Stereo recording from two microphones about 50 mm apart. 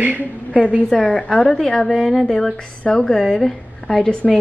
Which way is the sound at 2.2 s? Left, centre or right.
Centre.